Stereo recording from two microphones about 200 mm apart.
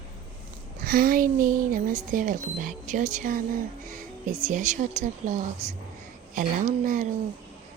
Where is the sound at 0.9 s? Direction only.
45° right (ahead or behind).